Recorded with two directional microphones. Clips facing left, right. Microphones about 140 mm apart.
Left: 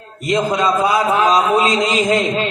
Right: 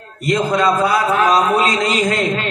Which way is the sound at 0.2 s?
15° left (ahead or behind).